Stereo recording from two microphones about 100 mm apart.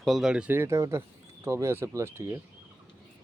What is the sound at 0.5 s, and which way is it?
Speech, 30° right (ahead or behind).